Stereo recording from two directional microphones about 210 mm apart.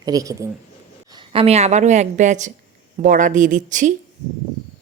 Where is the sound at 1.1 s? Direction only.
25° right (ahead or behind).